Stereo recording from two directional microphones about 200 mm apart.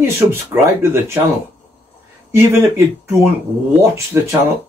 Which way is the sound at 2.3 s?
10° right (ahead or behind).